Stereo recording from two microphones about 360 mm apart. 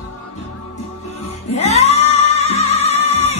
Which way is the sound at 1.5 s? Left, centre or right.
Centre.